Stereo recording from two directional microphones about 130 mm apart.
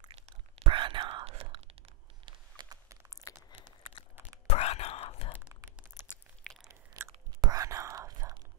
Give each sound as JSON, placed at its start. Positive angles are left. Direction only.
{"t": 0.1, "sound": "whispering", "side_deg": -45}
{"t": 2.2, "sound": "a sound", "side_deg": -35}
{"t": 4.5, "sound": "whispering", "side_deg": 50}
{"t": 5.5, "sound": "a sound", "side_deg": -25}
{"t": 6.4, "sound": "biting", "side_deg": 5}
{"t": 6.7, "sound": "whispering", "side_deg": -25}